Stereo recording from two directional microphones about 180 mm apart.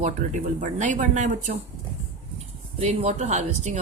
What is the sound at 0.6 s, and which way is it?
Speech, 40° right (ahead or behind).